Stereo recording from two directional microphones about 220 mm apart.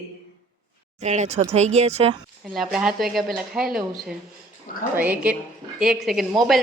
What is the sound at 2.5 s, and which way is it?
A woman's voice, centre (ahead or behind).